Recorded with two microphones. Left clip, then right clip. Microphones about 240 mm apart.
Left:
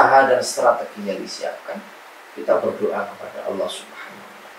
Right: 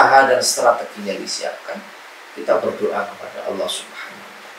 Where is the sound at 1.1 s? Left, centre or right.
Centre.